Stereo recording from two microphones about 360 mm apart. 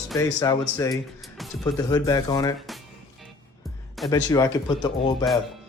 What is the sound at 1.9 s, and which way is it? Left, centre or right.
Speech, centre.